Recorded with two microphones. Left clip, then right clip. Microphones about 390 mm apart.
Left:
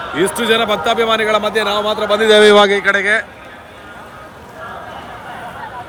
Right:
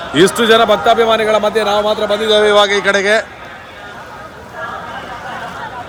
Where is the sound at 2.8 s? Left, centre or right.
Centre.